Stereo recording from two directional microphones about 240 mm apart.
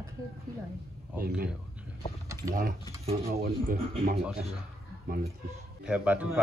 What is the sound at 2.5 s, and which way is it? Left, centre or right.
Speech, right.